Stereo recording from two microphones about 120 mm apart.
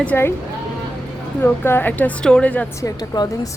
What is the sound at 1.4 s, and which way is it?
Speech, 20° left (ahead or behind).